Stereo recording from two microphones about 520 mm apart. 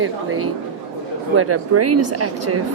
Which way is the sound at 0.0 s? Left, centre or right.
Right.